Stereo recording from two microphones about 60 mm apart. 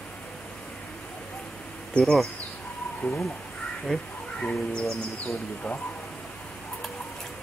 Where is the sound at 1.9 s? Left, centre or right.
Centre.